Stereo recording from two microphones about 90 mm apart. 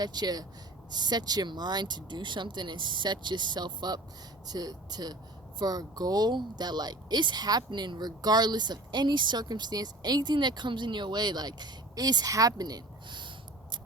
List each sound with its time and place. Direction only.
0.0 s speech: 50° right (ahead or behind)